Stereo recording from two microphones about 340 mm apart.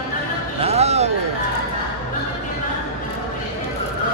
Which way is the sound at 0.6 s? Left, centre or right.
Centre.